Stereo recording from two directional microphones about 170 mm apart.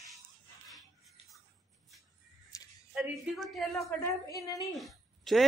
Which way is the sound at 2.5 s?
20° left (ahead or behind).